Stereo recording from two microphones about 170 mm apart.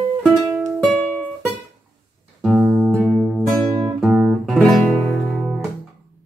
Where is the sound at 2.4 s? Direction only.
5° right (ahead or behind).